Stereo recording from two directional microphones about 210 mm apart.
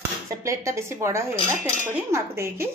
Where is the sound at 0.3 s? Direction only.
15° right (ahead or behind).